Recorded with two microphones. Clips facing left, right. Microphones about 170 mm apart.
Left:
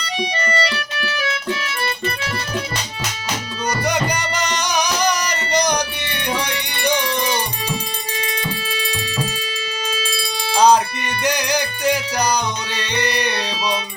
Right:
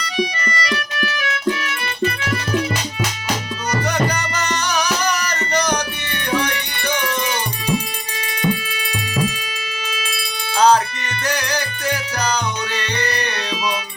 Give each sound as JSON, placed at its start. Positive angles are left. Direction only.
{"t": 0.0, "sound": "music", "side_deg": 30}
{"t": 3.8, "sound": "music", "side_deg": 15}
{"t": 10.6, "sound": "music", "side_deg": 15}